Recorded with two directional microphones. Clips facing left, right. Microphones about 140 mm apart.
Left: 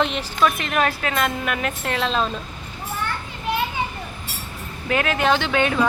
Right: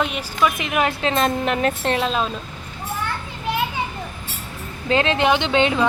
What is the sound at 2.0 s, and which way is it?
Speech, 10° right (ahead or behind).